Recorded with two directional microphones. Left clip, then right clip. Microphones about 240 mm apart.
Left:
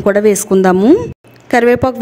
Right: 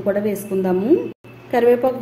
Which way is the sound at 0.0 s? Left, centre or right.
Left.